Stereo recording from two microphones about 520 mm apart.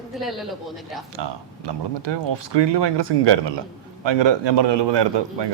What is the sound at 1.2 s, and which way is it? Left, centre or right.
A man's voice, right.